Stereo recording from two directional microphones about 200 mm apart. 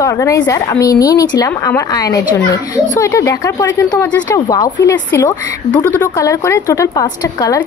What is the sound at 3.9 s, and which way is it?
Speech, 5° left (ahead or behind).